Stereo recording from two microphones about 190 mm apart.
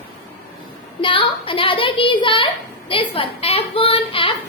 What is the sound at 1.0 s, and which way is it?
A child's voice, 25° left (ahead or behind).